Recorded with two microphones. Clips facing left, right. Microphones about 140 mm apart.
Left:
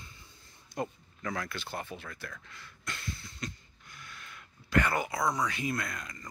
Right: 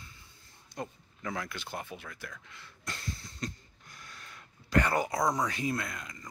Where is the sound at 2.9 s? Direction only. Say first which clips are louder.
Even; 35° right (ahead or behind).